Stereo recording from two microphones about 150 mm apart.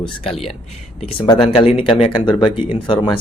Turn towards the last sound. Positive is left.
turn(degrees=35)  # may be behind; listen again after turning